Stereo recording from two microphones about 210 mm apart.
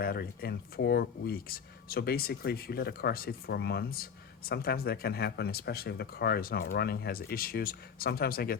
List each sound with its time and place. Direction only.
0.0 s speech: 45° left (ahead or behind)